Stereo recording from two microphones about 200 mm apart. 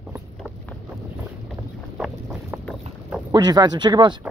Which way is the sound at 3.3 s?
20° right (ahead or behind).